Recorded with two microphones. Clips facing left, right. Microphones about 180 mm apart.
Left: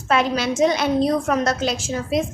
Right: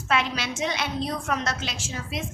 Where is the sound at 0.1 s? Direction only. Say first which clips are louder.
Left 7 dB; 40° left (ahead or behind).